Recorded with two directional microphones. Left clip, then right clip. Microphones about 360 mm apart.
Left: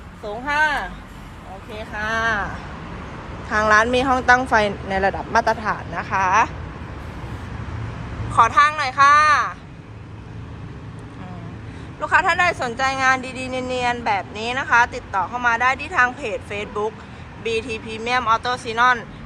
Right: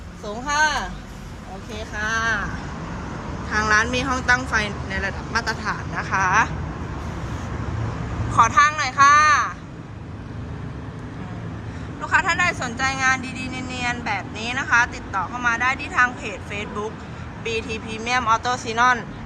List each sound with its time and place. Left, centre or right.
0.4 s a sound: centre
1.7 s vehicle: centre
3.5 s speech: centre
8.3 s speech: centre
11.9 s speech: centre